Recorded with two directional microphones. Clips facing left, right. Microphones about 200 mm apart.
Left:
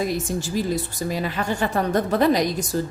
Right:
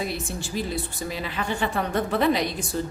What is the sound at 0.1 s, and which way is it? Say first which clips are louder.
A woman's voice: left 6 dB; 40° left (ahead or behind).